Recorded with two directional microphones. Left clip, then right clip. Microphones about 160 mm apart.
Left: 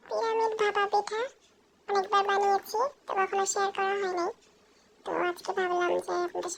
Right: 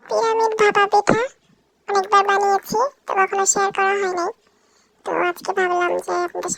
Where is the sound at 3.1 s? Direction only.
35° right (ahead or behind).